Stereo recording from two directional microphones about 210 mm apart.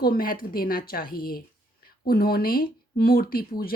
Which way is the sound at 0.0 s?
45° left (ahead or behind).